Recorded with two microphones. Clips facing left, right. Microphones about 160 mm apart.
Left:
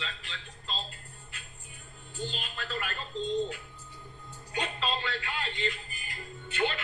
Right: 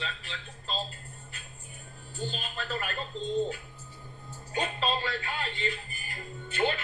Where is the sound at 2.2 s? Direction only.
40° right (ahead or behind).